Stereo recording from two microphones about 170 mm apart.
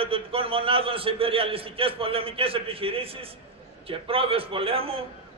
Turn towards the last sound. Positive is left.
turn(degrees=-35)  # may be behind; listen again after turning